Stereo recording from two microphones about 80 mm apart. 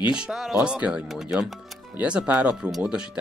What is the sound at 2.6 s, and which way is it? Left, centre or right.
Speech, centre.